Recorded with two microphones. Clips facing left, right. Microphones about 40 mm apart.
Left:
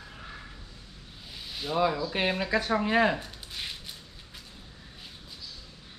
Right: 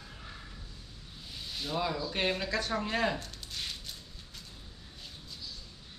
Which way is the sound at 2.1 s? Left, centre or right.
Centre.